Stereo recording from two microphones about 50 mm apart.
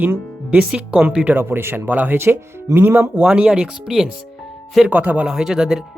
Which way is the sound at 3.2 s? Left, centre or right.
Right.